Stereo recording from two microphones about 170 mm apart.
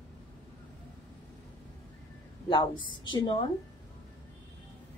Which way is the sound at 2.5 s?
30° left (ahead or behind).